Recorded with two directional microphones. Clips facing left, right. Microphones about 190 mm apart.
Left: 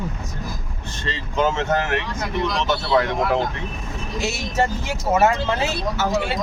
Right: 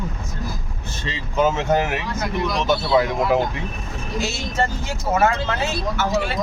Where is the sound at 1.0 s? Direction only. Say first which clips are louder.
Right 1 dB; 10° right (ahead or behind).